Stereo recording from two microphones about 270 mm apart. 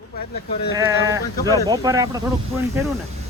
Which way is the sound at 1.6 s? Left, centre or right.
Centre.